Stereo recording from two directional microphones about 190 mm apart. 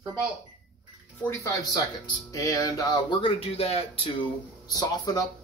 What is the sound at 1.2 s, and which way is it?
Speech, 15° left (ahead or behind).